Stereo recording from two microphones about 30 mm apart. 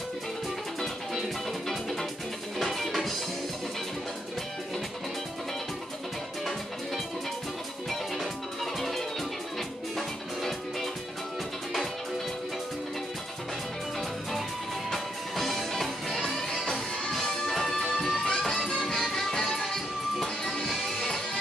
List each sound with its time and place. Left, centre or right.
1.7 s music: centre
8.7 s music: centre
14.9 s music: centre
18.1 s music: left
18.8 s music: centre